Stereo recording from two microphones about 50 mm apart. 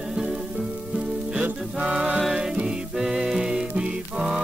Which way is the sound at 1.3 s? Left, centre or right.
Right.